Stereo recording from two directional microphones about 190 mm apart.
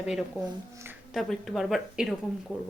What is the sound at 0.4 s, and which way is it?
Speech, 15° right (ahead or behind).